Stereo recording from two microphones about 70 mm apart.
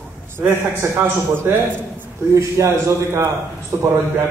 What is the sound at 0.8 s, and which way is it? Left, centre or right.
Speech, right.